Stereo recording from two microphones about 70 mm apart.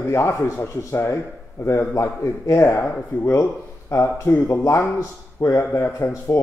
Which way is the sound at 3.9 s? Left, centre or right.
Left.